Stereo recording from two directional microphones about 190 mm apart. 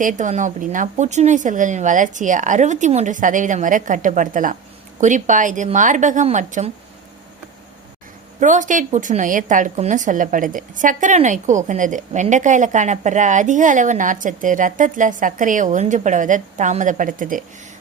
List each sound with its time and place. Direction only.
0.0 s a woman's voice: 40° right (ahead or behind)
8.4 s a woman's voice: 40° right (ahead or behind)